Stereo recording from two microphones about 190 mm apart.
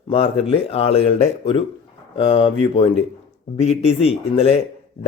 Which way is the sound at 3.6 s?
35° left (ahead or behind).